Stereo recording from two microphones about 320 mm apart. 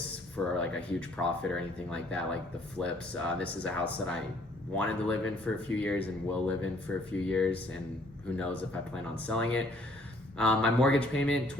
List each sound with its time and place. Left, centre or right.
0.6 s speech: centre
9.1 s speech: centre